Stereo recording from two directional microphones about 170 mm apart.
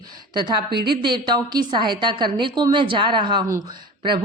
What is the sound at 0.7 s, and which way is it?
Speech, 70° right (ahead or behind).